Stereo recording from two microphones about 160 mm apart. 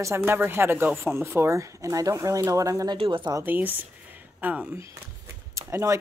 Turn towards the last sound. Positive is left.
turn(degrees=-20)  # may be behind; listen again after turning